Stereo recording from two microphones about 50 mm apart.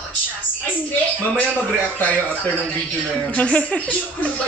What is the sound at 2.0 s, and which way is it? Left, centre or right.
A man's voice, left.